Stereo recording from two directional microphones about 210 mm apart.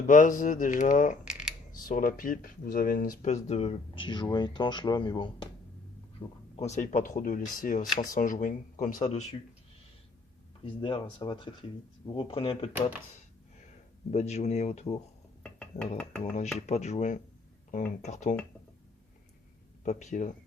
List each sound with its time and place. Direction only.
0.1 s speech: 40° left (ahead or behind)
10.6 s speech: 25° left (ahead or behind)
14.1 s speech: 30° left (ahead or behind)
15.4 s dishes: 5° left (ahead or behind)
16.0 s a sound: 5° left (ahead or behind)
16.6 s speech: 30° left (ahead or behind)
19.8 s speech: 35° left (ahead or behind)